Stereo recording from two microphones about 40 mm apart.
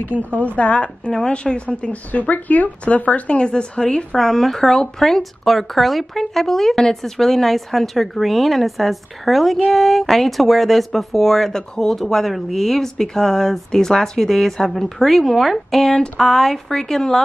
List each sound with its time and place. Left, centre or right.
0.4 s a woman's voice: left
1.9 s speech: left
2.8 s a woman's voice: left; by 17.2 s centre